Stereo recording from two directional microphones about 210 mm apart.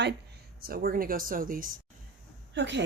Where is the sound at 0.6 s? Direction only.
45° right (ahead or behind).